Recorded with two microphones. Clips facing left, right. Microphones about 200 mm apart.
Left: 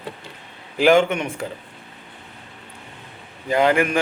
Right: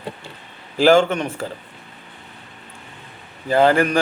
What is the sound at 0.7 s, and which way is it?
Speech, 35° right (ahead or behind).